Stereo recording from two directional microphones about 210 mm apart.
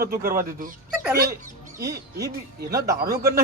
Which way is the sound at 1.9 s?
15° right (ahead or behind).